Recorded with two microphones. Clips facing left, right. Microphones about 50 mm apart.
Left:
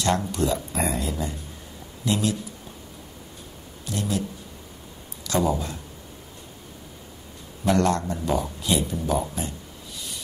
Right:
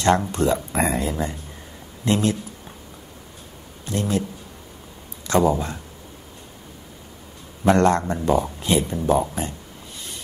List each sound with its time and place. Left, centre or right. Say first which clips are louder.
0.3 s speech: right 4 dB; right
3.8 s speech: right 4 dB; right
5.2 s speech: right 5 dB; right
7.6 s speech: right 5 dB; right